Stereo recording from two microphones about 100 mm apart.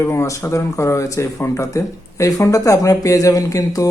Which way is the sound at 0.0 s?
25° left (ahead or behind).